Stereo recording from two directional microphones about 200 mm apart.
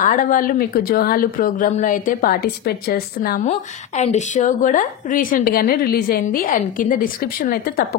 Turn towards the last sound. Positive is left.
turn(degrees=45)  # may be behind; listen again after turning